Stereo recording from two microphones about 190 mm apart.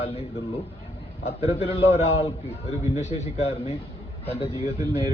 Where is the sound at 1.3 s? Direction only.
30° left (ahead or behind).